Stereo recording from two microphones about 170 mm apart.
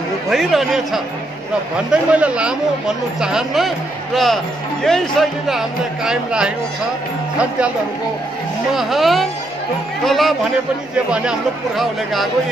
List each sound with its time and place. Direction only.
0.3 s speech: centre (ahead or behind)
8.7 s speech: centre (ahead or behind)